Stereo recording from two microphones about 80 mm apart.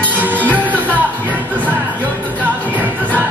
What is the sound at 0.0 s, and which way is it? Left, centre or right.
Music, right.